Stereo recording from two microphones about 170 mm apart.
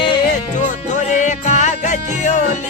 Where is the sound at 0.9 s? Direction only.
45° left (ahead or behind).